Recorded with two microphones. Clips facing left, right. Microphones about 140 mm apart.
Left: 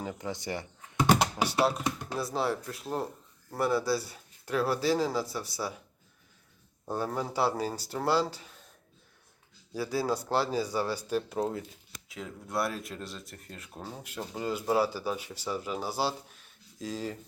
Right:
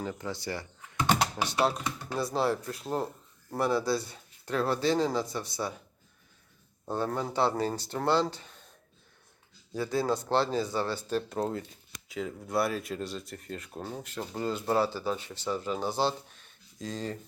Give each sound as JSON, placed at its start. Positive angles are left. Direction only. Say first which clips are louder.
{"t": 0.0, "sound": "speech", "louder": "right 1 dB", "side_deg": 15}
{"t": 1.0, "sound": "typing", "louder": "left 2 dB", "side_deg": 10}
{"t": 2.0, "sound": "speech", "louder": "right 4 dB", "side_deg": 0}
{"t": 6.8, "sound": "speech", "louder": "right 1 dB", "side_deg": 10}
{"t": 9.7, "sound": "speech", "louder": "right 1 dB", "side_deg": 5}